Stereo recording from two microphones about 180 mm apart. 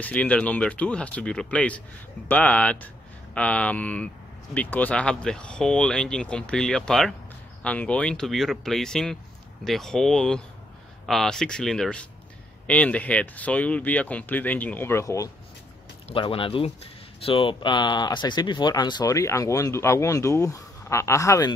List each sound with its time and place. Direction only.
0.0 s speech: 10° left (ahead or behind)
16.1 s speech: 30° left (ahead or behind)